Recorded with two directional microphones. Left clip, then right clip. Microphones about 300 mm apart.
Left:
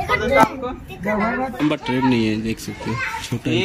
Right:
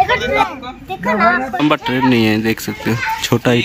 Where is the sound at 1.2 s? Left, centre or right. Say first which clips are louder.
Right 10 dB; right.